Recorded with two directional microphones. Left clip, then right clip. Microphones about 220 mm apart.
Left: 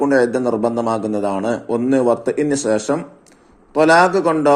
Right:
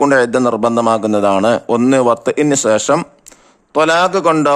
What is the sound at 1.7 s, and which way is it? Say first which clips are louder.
Speech: right 6 dB; 55° right (ahead or behind).